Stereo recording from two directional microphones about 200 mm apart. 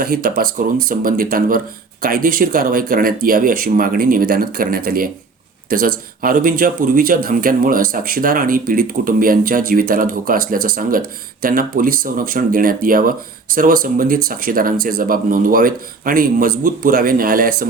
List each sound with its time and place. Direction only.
0.0 s speech: 45° right (ahead or behind)